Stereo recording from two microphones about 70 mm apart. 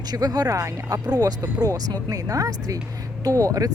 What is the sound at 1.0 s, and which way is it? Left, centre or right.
Speech, right.